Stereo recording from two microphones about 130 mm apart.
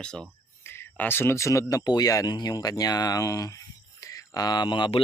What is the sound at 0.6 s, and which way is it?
Speech, 15° left (ahead or behind).